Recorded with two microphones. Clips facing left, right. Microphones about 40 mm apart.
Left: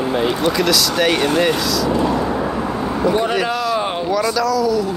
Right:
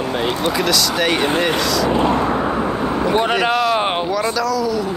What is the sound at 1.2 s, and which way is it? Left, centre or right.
Speech, centre.